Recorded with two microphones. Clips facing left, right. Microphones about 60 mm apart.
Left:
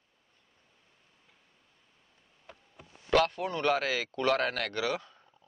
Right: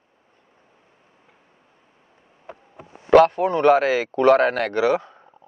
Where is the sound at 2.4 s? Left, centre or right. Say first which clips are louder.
Right 12 dB; right.